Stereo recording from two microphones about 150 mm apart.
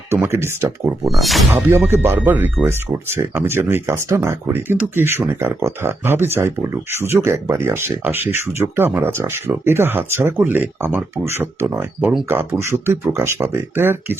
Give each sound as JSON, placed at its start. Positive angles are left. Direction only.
{"t": 0.1, "sound": "speech", "side_deg": -15}
{"t": 1.0, "sound": "speech", "side_deg": 0}
{"t": 1.5, "sound": "speech", "side_deg": -15}